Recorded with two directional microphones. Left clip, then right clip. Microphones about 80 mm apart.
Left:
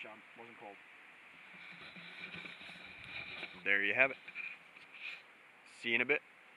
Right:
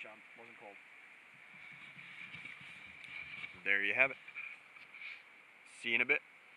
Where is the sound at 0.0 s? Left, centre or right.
Centre.